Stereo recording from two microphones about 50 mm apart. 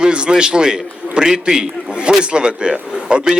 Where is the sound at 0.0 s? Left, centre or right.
Centre.